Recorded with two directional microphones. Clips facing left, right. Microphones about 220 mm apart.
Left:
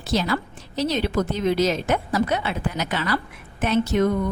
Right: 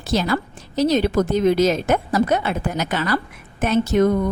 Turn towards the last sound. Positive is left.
turn(degrees=-45)  # may be behind; listen again after turning